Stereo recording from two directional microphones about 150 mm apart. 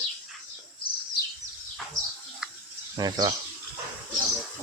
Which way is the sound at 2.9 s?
25° right (ahead or behind).